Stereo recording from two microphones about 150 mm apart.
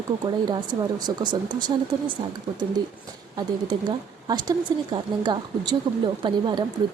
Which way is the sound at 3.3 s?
30° right (ahead or behind).